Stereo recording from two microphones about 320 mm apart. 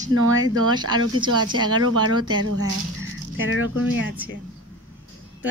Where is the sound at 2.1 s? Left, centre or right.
Centre.